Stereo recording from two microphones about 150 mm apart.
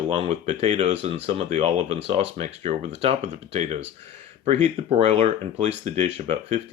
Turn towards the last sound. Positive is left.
turn(degrees=-50)  # may be behind; listen again after turning